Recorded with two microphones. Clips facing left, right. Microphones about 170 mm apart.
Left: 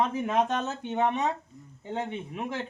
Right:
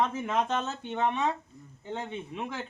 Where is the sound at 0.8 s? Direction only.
15° left (ahead or behind).